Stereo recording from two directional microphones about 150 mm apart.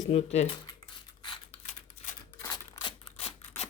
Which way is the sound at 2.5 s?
25° left (ahead or behind).